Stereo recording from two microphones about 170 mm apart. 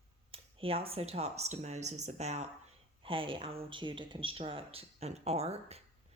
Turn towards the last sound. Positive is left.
turn(degrees=-40)  # may be behind; listen again after turning